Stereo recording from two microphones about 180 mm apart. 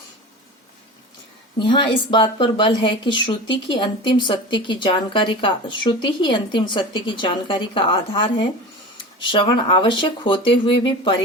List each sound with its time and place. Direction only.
1.5 s speech: 25° left (ahead or behind)